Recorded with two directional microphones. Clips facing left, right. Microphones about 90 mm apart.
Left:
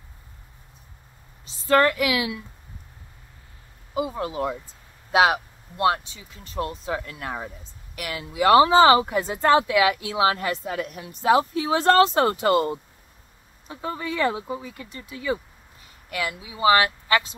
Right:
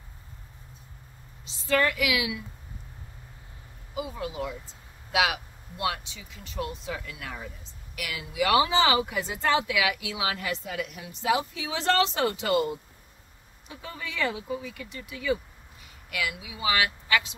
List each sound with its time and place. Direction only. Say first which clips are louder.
1.4 s speech: left 6 dB; 45° left (ahead or behind)
3.9 s speech: left 6 dB; 45° left (ahead or behind)